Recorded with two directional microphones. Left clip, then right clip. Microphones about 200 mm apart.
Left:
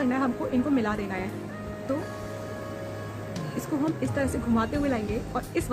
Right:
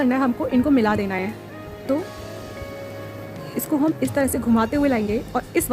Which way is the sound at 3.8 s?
45° right (ahead or behind).